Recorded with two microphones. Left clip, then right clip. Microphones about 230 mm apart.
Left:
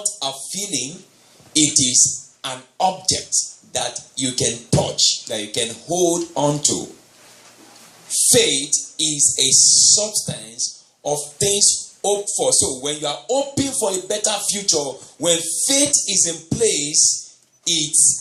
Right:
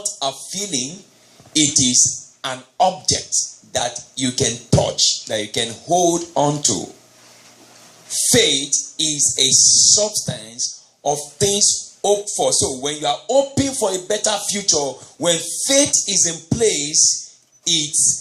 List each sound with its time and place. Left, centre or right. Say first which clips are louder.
0.0 s a sound: right 2 dB; right
1.5 s speech: right 1 dB; right
8.3 s speech: right 1 dB; right